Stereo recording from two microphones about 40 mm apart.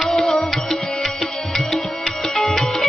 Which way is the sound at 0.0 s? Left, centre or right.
Centre.